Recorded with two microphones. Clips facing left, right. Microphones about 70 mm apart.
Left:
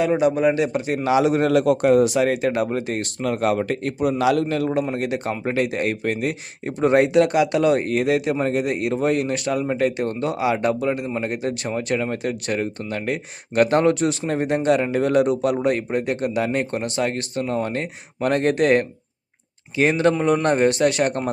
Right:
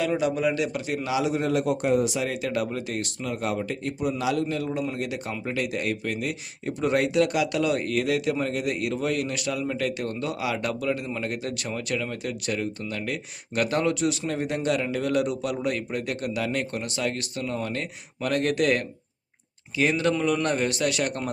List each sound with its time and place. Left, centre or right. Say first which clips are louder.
0.0 s speech: left 6 dB; left
2.4 s speech: left 6 dB; left